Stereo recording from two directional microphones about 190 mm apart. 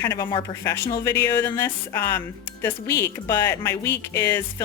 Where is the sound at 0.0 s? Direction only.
15° left (ahead or behind).